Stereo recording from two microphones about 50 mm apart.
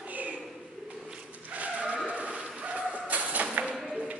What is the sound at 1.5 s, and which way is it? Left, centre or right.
Vehicle, right.